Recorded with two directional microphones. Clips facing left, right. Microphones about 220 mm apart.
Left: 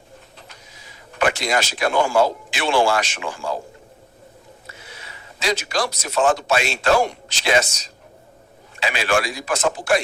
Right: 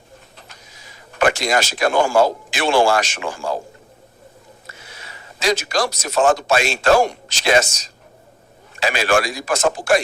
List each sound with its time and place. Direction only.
0.3 s speech: 45° right (ahead or behind)
4.6 s a man's voice: 45° right (ahead or behind)